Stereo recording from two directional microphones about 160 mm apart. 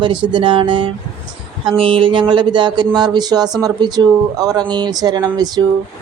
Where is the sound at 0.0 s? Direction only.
30° right (ahead or behind).